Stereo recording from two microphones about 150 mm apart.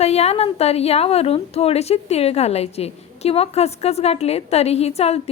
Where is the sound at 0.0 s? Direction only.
45° left (ahead or behind).